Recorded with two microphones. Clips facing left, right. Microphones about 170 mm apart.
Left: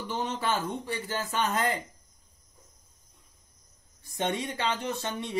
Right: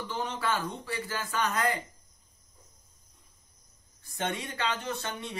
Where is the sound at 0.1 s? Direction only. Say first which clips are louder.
Left 2 dB; 25° left (ahead or behind).